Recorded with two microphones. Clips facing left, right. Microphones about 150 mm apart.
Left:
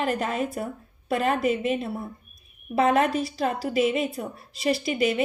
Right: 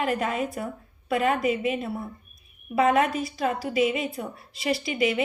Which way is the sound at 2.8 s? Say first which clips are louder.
Even; 30° left (ahead or behind).